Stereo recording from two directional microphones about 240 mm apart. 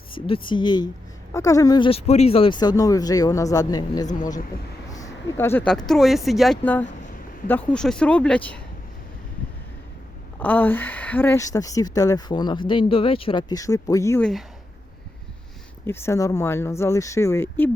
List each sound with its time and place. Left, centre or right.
0.1 s speech: left; by 8.6 s centre
10.4 s speech: centre
15.9 s speech: centre